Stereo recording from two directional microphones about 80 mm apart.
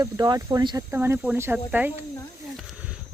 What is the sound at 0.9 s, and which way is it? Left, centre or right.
Speech, right.